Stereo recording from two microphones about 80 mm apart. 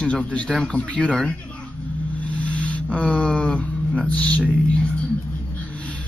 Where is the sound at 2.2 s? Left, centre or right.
Centre.